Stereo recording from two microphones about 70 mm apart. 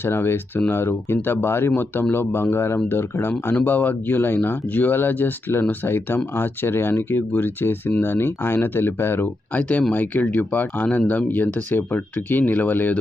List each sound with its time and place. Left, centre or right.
0.0 s speech: left